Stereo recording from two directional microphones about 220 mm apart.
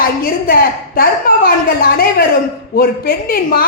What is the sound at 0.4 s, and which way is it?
A woman's voice, 40° left (ahead or behind).